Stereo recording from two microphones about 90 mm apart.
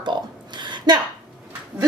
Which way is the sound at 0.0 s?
60° right (ahead or behind).